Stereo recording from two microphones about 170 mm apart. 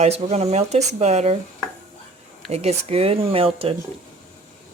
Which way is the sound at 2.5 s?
35° right (ahead or behind).